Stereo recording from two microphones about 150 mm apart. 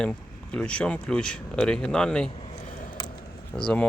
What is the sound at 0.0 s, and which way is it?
Speech, 5° left (ahead or behind).